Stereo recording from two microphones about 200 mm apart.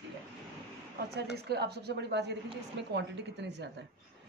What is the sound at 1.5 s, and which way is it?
Speech, 55° right (ahead or behind).